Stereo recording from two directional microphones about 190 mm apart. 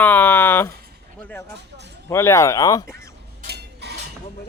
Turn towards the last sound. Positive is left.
turn(degrees=-60)  # may be behind; listen again after turning